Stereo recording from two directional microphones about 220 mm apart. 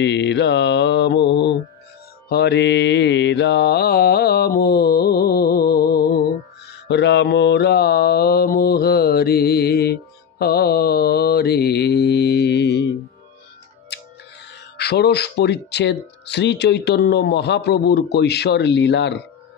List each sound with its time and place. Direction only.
0.0 s speech: 50° left (ahead or behind)
2.2 s mantra: 45° left (ahead or behind)
13.9 s music: 50° left (ahead or behind)
14.8 s speech: 45° left (ahead or behind)